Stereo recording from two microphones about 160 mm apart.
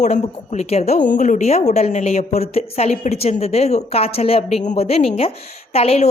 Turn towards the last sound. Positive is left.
turn(degrees=40)  # may be behind; listen again after turning